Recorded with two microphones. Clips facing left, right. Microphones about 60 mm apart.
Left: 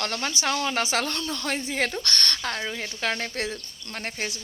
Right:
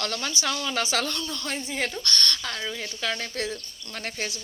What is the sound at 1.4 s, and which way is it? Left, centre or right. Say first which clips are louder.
Speech: left 3 dB; left.